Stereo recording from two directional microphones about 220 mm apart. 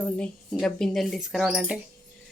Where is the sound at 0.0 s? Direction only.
5° left (ahead or behind).